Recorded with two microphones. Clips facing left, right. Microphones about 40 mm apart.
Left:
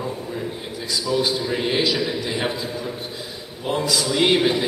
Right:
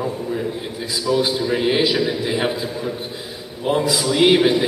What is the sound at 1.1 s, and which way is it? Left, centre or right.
A man's voice, centre.